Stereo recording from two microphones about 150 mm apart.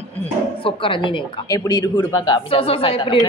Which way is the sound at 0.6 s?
35° left (ahead or behind).